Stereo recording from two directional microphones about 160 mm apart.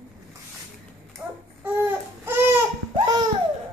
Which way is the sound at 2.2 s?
10° right (ahead or behind).